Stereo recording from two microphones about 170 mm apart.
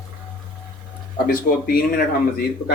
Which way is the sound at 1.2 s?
60° left (ahead or behind).